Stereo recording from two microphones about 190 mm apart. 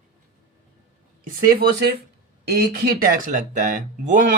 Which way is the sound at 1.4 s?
55° right (ahead or behind).